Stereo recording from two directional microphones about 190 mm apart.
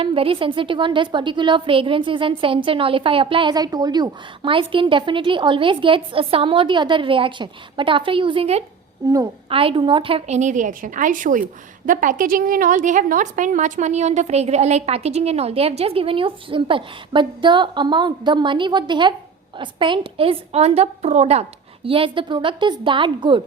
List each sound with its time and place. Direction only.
0.0 s a woman's voice: 30° right (ahead or behind)